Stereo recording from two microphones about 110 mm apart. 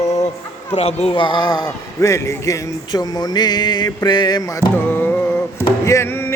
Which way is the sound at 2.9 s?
40° left (ahead or behind).